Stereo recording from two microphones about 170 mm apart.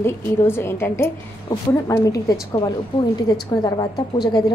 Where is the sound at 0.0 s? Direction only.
15° left (ahead or behind).